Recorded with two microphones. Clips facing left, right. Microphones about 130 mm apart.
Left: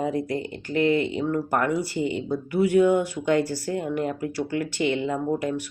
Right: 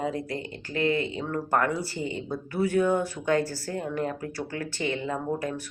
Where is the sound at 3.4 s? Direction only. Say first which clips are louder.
Left 4 dB; 40° right (ahead or behind).